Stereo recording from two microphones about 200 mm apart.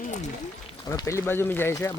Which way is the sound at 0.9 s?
15° left (ahead or behind).